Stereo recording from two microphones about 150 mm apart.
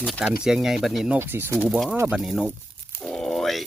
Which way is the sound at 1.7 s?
Centre (ahead or behind).